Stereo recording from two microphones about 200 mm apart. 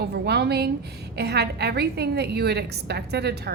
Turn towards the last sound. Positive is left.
turn(degrees=-55)  # may be behind; listen again after turning